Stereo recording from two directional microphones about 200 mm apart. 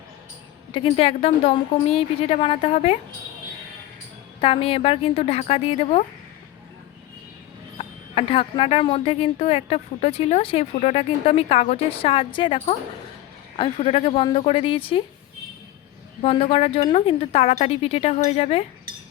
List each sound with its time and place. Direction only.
0.7 s a woman's voice: 30° left (ahead or behind)
4.4 s a woman's voice: 25° left (ahead or behind)
7.8 s a woman's voice: 25° left (ahead or behind)
13.7 s a woman's voice: 30° left (ahead or behind)
16.2 s a woman's voice: 30° left (ahead or behind)